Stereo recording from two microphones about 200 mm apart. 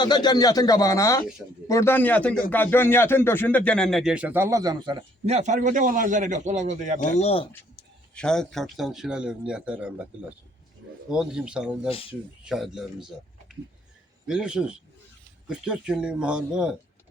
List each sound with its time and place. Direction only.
0.0 s speech: 20° left (ahead or behind); by 7.0 s 35° right (ahead or behind)
7.0 s speech: 35° left (ahead or behind)
8.1 s speech: 5° left (ahead or behind)
11.1 s speech: 5° right (ahead or behind)
11.9 s speech: 30° left (ahead or behind)
12.5 s speech: centre (ahead or behind)
14.3 s speech: 5° right (ahead or behind)